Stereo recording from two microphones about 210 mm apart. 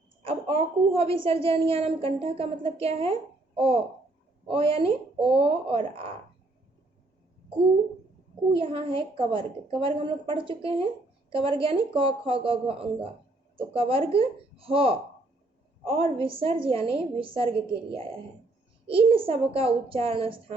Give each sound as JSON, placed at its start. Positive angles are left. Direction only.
{"t": 0.3, "sound": "a woman's voice", "side_deg": -25}
{"t": 8.5, "sound": "a woman's voice", "side_deg": -25}